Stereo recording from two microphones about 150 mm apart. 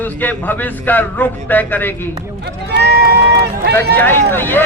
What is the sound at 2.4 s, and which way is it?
Speech, 90° right.